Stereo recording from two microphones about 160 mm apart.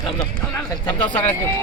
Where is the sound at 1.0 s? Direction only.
10° left (ahead or behind).